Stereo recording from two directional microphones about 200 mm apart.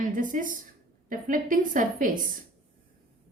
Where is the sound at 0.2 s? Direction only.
40° right (ahead or behind).